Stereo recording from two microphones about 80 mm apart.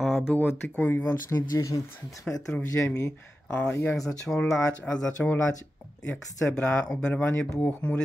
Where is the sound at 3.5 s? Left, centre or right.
Left.